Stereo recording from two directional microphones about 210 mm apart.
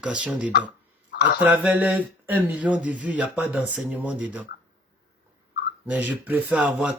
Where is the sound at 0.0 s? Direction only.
5° right (ahead or behind).